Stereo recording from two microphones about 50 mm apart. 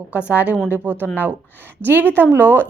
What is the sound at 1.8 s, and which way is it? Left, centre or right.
Speech, right.